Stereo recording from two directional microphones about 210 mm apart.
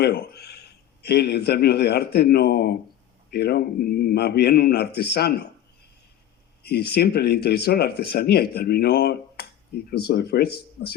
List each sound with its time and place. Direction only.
0.0 s a man's voice: 50° left (ahead or behind)
6.6 s speech: 50° left (ahead or behind)